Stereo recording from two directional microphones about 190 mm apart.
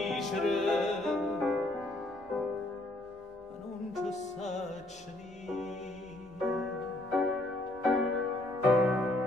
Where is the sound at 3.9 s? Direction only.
35° left (ahead or behind).